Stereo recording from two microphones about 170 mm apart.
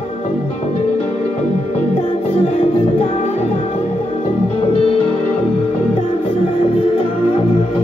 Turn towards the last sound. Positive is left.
turn(degrees=30)  # may be behind; listen again after turning